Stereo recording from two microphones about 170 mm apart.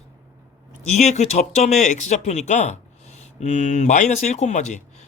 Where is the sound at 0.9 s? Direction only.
40° left (ahead or behind).